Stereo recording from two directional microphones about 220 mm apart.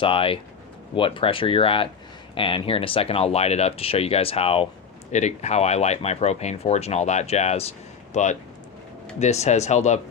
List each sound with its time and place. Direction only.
0.0 s speech: 25° left (ahead or behind)